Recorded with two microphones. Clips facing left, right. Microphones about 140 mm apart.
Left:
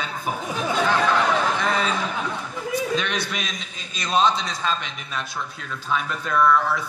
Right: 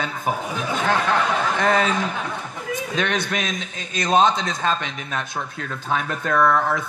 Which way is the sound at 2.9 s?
50° right (ahead or behind).